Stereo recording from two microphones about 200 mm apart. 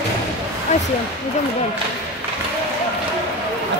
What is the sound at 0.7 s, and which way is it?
Speech, 35° left (ahead or behind).